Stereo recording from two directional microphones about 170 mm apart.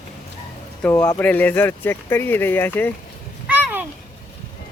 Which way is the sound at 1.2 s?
10° left (ahead or behind).